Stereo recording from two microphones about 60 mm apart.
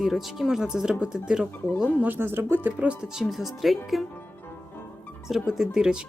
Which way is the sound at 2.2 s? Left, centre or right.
Right.